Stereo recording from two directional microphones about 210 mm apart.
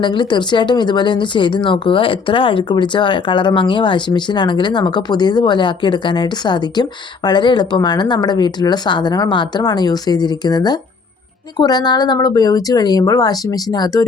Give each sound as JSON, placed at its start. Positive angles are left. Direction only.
{"t": 0.0, "sound": "speech", "side_deg": 20}